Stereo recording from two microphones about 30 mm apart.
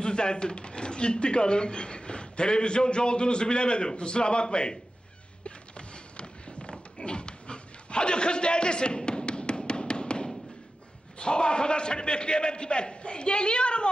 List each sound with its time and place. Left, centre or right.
0.0 s speech: left
5.4 s a sound: left
11.1 s speech: left